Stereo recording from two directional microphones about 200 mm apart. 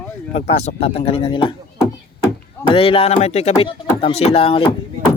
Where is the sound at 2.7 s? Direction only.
25° left (ahead or behind).